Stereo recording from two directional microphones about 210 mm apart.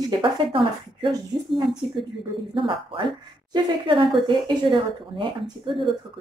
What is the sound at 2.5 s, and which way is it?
A woman's voice, 25° right (ahead or behind).